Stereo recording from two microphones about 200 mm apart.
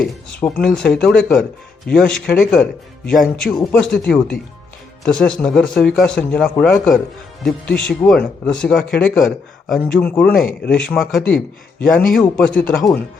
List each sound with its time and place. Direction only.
0.0 s speech: 5° left (ahead or behind)